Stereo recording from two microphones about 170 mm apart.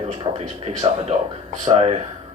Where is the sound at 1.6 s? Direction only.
35° right (ahead or behind).